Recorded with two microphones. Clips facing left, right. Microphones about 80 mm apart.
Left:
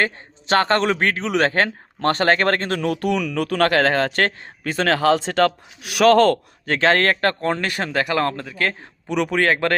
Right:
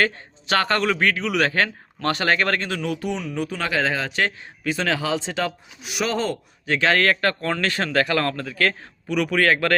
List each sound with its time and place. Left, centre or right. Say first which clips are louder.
0.0 s a man's voice: even; left
6.7 s speech: left 2 dB; left
7.5 s a man's voice: right 1 dB; left